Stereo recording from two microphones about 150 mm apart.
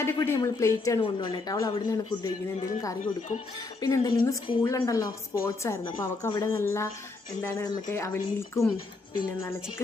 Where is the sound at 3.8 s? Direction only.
20° left (ahead or behind).